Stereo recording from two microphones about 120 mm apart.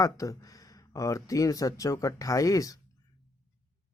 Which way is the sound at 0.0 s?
30° left (ahead or behind).